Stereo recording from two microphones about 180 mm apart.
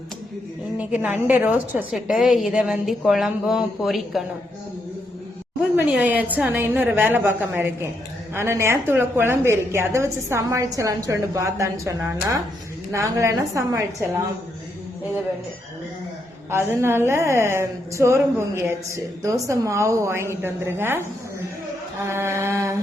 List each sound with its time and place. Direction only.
0.8 s a woman's voice: 10° right (ahead or behind)
5.7 s a woman's voice: 10° right (ahead or behind)
16.5 s a woman's voice: 15° right (ahead or behind)
22.0 s a woman's voice: 15° right (ahead or behind)